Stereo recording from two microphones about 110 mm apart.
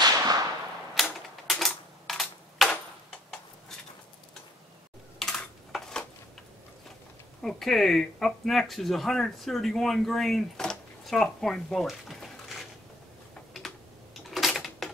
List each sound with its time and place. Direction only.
0.0 s whip: 35° right (ahead or behind)
1.0 s typewriter: 5° left (ahead or behind)
5.2 s a sound: 5° left (ahead or behind)
7.4 s speech: centre (ahead or behind)
13.5 s typing: centre (ahead or behind)
14.3 s a sound: centre (ahead or behind)